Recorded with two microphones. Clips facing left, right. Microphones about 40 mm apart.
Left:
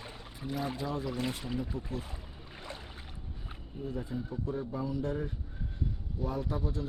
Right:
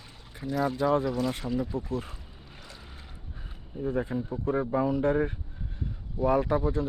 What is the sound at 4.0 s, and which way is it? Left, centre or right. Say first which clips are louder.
Speech: right 5 dB; right.